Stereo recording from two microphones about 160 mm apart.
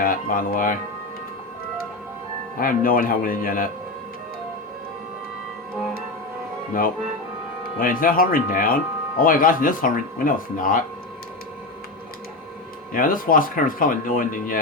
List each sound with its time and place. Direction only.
0.0 s speech: 60° left (ahead or behind)
2.6 s speech: 60° left (ahead or behind)
7.8 s speech: 60° left (ahead or behind)
12.9 s speech: 60° left (ahead or behind)